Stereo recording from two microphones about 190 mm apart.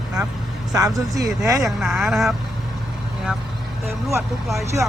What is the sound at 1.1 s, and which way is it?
Speech, 15° right (ahead or behind).